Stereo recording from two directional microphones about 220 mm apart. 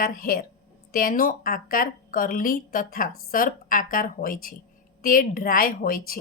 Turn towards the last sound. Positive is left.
turn(degrees=40)  # may be behind; listen again after turning